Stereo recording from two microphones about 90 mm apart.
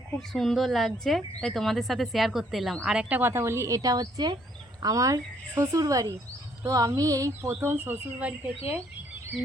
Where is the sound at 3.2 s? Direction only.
25° right (ahead or behind).